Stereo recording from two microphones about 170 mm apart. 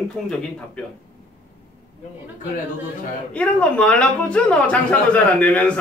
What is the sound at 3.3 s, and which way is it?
Speech, 5° left (ahead or behind).